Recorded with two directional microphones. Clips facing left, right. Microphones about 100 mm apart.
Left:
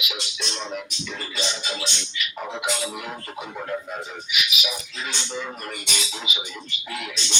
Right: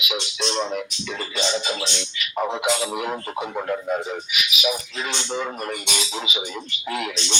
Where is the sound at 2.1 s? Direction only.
50° right (ahead or behind).